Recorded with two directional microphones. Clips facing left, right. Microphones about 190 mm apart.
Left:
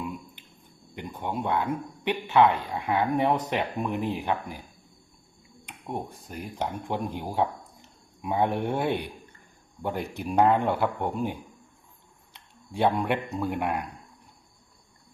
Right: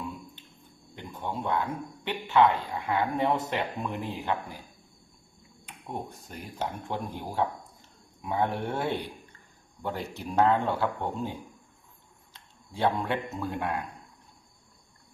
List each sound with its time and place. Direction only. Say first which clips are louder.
0.9 s speech: left 3 dB; 15° left (ahead or behind)
5.6 s speech: left 3 dB; 10° left (ahead or behind)